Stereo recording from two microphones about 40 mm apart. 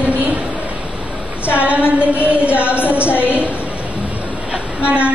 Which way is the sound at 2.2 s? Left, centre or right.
Right.